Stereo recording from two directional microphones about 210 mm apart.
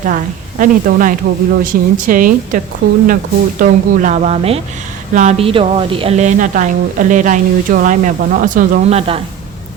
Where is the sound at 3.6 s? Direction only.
35° right (ahead or behind).